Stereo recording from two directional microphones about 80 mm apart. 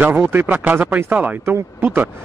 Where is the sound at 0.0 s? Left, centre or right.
Right.